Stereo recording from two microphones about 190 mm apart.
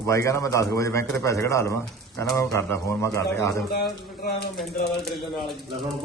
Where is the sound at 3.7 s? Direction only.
55° left (ahead or behind).